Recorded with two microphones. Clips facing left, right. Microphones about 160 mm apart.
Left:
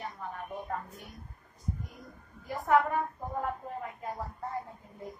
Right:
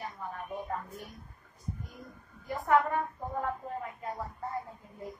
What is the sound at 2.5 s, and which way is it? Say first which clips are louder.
Speech: even; 20° left (ahead or behind).